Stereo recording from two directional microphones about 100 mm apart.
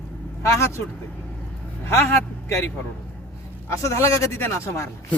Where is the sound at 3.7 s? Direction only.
30° left (ahead or behind).